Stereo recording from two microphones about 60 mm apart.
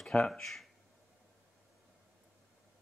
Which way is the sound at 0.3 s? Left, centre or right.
Centre.